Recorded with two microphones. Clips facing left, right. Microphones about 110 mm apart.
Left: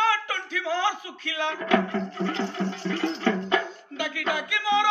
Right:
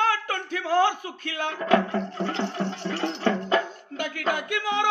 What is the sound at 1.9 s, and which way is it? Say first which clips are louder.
Music: even; 20° right (ahead or behind).